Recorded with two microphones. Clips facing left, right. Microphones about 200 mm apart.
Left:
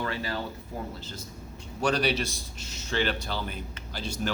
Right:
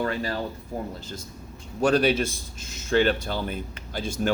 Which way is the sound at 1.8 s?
50° right (ahead or behind).